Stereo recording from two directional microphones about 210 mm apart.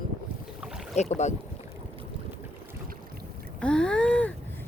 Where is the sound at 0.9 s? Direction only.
30° left (ahead or behind).